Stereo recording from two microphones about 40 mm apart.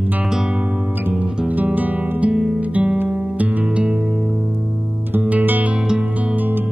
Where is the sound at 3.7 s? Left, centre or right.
Right.